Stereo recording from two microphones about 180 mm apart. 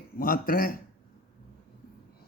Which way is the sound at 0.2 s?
50° left (ahead or behind).